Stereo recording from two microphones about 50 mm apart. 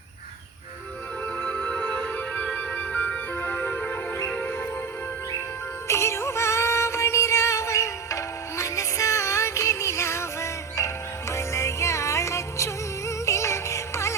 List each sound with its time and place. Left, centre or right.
1.9 s music: left
5.9 s music: left